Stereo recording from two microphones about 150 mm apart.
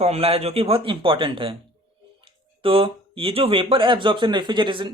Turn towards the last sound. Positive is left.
turn(degrees=-35)  # may be behind; listen again after turning